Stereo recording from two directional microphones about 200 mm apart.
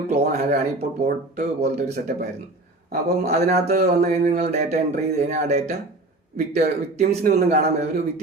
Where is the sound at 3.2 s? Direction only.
35° right (ahead or behind).